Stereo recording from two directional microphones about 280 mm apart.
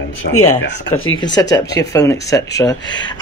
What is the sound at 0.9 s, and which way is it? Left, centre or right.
Speech, left.